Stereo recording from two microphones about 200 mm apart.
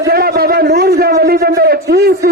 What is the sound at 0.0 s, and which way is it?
A man's voice, 50° right (ahead or behind).